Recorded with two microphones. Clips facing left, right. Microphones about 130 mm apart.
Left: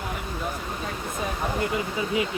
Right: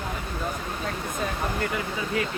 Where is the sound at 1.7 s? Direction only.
20° left (ahead or behind).